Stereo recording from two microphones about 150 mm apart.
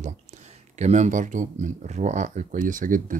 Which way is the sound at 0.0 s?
50° right (ahead or behind).